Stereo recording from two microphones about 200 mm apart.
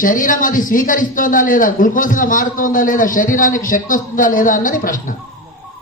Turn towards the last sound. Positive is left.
turn(degrees=40)  # may be behind; listen again after turning